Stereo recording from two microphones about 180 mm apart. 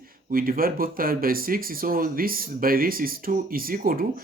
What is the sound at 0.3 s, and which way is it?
Speech, 55° right (ahead or behind).